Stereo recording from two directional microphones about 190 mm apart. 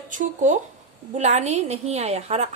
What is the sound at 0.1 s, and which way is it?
A woman's voice, 40° right (ahead or behind).